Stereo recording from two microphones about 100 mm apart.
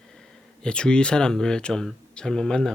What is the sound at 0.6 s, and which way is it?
Speech, 10° left (ahead or behind).